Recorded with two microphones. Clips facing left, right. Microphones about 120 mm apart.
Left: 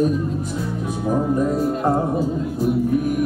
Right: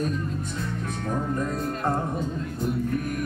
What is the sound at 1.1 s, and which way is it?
Music, 15° left (ahead or behind).